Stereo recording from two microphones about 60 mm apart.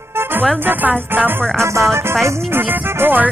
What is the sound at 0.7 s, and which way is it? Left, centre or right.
Speech, right.